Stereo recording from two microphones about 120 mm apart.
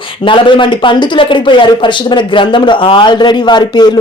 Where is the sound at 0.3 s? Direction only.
45° left (ahead or behind).